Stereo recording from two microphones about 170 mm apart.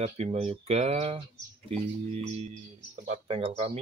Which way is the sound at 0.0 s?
40° right (ahead or behind).